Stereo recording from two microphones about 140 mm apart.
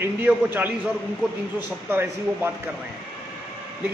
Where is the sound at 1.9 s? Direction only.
15° right (ahead or behind).